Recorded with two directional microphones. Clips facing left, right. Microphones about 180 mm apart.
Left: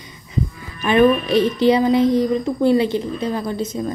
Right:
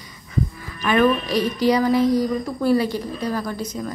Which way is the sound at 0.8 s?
25° left (ahead or behind).